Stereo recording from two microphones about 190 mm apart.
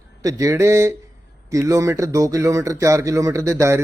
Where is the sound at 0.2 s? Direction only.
15° right (ahead or behind).